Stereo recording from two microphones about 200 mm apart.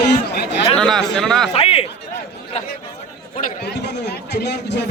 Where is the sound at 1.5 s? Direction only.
30° left (ahead or behind).